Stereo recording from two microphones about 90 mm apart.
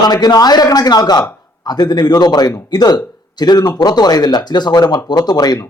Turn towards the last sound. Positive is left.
turn(degrees=50)  # may be behind; listen again after turning